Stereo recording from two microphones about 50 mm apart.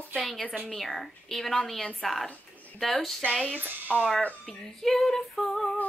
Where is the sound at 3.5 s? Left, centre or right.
Right.